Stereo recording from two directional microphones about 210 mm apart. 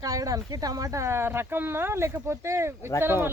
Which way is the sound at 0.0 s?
15° right (ahead or behind).